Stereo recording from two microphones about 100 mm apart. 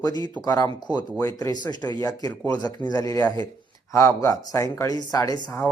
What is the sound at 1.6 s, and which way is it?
Speech, 45° left (ahead or behind).